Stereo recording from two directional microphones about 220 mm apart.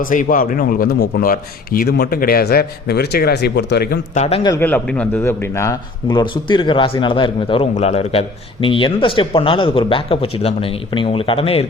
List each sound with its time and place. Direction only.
0.0 s speech: 35° left (ahead or behind)
4.2 s a man's voice: 25° left (ahead or behind)
4.5 s a man's voice: 10° left (ahead or behind); by 11.6 s 25° left (ahead or behind)